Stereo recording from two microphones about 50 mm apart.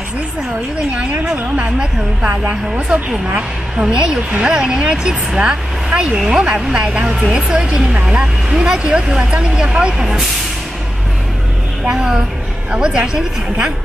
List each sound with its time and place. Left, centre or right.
2.9 s speech: right
11.8 s speech: centre